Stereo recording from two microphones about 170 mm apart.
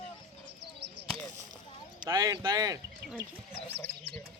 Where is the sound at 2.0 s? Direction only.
25° right (ahead or behind).